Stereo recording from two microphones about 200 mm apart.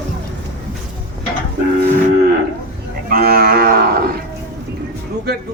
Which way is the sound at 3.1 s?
50° right (ahead or behind).